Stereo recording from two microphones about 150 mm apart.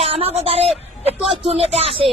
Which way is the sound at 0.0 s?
40° right (ahead or behind).